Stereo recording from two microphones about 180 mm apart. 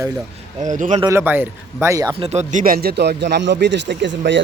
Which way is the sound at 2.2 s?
40° right (ahead or behind).